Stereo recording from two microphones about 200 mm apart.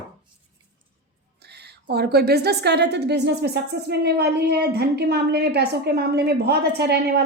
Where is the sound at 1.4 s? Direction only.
55° right (ahead or behind).